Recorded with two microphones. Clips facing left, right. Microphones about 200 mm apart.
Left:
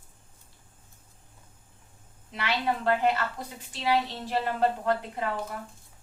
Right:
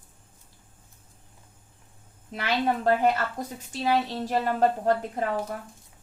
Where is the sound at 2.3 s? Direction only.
45° right (ahead or behind).